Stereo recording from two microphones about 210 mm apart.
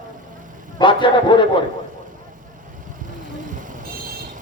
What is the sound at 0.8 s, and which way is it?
Speech, 25° left (ahead or behind).